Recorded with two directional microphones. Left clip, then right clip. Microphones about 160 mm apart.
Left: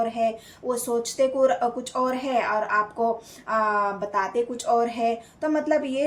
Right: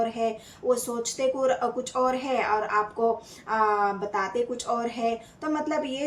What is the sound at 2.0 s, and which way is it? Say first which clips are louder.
Speech: left 1 dB; 40° left (ahead or behind).